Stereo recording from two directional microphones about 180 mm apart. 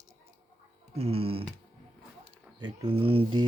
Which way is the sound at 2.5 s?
25° right (ahead or behind).